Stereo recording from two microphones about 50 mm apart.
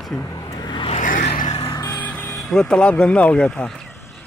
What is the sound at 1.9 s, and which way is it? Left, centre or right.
Music, left.